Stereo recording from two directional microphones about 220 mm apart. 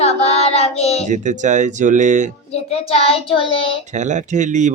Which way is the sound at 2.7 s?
25° left (ahead or behind).